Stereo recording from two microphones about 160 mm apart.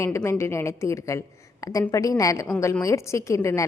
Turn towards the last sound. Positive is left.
turn(degrees=20)  # may be behind; listen again after turning